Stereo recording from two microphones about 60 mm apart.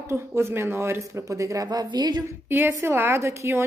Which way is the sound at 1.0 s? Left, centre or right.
Right.